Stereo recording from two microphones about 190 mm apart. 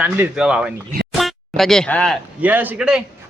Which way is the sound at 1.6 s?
Centre (ahead or behind).